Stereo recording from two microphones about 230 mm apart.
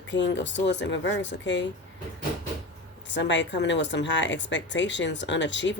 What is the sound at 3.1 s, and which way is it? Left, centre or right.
Speech, left.